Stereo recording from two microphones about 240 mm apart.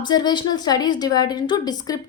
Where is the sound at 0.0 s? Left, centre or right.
Centre.